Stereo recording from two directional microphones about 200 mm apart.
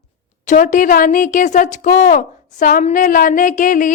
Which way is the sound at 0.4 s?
40° left (ahead or behind).